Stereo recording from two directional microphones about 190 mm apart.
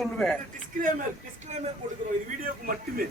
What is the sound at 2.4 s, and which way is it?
Speech, 50° right (ahead or behind).